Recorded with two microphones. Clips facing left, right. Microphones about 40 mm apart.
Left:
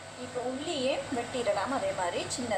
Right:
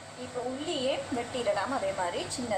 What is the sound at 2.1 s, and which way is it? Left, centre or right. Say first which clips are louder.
Speech: even; left.